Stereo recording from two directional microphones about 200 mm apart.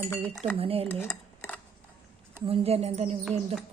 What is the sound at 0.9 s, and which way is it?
Dishes, 10° left (ahead or behind).